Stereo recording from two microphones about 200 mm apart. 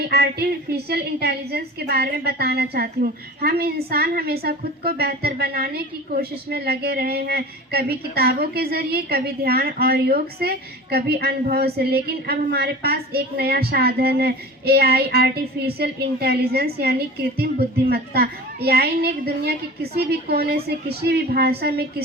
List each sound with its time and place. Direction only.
0.0 s a woman's voice: 55° right (ahead or behind)